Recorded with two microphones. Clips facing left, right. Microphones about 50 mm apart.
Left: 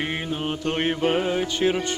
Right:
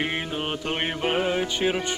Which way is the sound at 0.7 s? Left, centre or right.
Centre.